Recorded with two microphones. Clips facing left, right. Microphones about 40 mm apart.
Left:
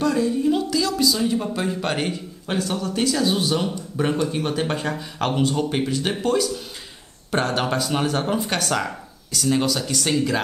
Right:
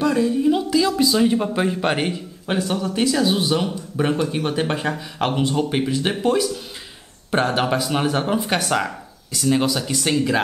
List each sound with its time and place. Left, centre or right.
0.0 s speech: centre